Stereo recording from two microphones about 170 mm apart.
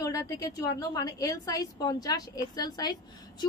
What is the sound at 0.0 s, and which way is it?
A woman's voice, 20° left (ahead or behind).